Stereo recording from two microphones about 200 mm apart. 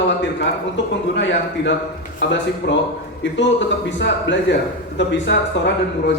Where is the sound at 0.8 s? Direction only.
65° left (ahead or behind).